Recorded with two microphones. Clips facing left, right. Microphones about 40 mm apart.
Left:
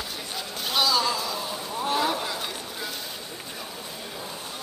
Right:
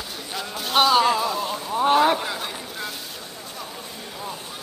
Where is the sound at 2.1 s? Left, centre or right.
Centre.